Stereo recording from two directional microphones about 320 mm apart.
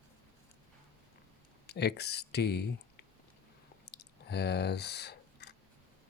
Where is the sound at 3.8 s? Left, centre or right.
Left.